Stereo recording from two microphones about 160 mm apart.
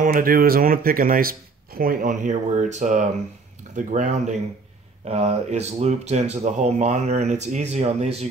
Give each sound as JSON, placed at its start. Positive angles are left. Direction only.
{"t": 0.0, "sound": "speech", "side_deg": -60}